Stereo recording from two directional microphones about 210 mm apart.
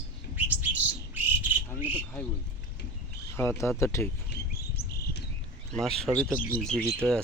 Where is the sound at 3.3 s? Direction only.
10° left (ahead or behind).